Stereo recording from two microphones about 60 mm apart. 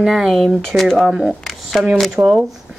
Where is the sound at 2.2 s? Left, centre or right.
Right.